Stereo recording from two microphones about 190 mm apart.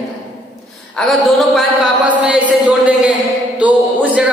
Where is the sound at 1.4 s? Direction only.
5° right (ahead or behind).